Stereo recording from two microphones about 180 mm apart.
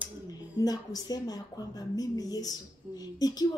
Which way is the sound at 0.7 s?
20° left (ahead or behind).